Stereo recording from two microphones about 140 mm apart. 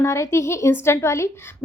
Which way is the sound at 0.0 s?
20° left (ahead or behind).